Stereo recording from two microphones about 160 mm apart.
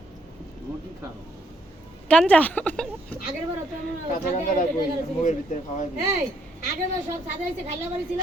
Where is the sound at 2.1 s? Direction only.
10° left (ahead or behind).